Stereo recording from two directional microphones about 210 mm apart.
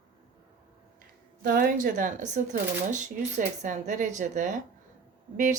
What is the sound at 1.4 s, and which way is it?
Speech, 45° right (ahead or behind).